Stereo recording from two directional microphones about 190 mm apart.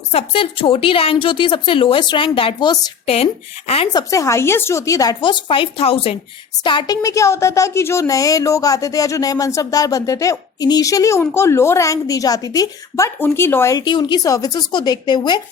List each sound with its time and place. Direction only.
0.1 s a woman's voice: 30° left (ahead or behind)
3.9 s a woman's voice: 15° left (ahead or behind)